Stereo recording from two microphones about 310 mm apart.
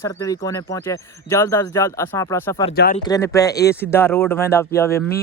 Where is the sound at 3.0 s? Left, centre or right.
Centre.